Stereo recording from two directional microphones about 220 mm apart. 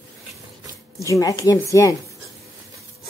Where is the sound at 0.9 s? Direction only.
15° left (ahead or behind).